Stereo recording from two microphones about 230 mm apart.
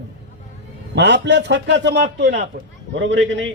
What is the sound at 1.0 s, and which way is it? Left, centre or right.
A man's voice, right.